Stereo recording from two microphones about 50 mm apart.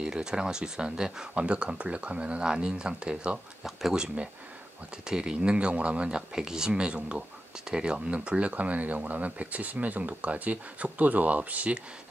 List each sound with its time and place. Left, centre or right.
0.0 s speech: centre
1.3 s speech: right